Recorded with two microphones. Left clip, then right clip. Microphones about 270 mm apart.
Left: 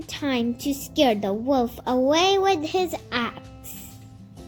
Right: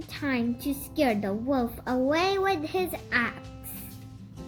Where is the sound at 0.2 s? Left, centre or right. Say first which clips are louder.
Left 4 dB; centre.